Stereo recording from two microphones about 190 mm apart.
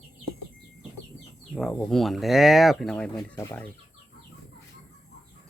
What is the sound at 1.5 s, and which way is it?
Speech, 5° left (ahead or behind).